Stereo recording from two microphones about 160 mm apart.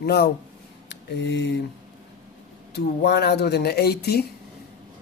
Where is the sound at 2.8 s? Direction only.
90° left.